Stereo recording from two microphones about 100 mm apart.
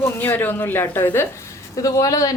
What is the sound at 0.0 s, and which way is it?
A woman's voice, 20° left (ahead or behind).